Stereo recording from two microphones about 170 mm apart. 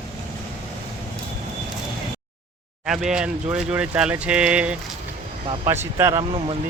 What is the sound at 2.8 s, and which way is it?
Speech, 5° right (ahead or behind).